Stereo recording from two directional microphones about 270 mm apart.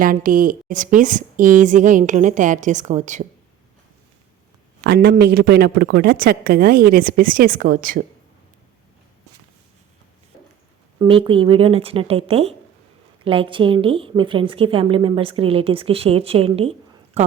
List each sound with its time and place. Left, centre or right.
0.0 s a woman's voice: right
4.8 s speech: right
11.0 s a woman's voice: centre